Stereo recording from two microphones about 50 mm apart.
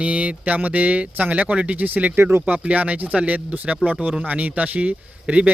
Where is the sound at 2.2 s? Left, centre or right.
Right.